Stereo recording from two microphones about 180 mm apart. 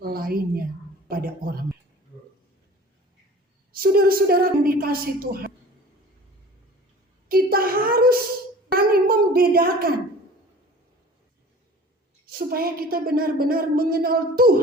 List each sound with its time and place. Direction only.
0.0 s a woman's voice: 55° right (ahead or behind)
3.7 s speech: 55° right (ahead or behind)
7.3 s a sound: 55° right (ahead or behind)
12.2 s speech: 55° right (ahead or behind)